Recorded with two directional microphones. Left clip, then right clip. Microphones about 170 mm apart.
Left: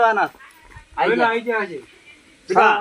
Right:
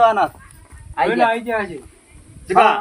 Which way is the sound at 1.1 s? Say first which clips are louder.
Right 1 dB; 10° right (ahead or behind).